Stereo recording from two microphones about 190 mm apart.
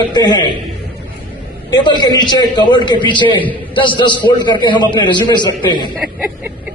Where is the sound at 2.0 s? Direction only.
25° left (ahead or behind).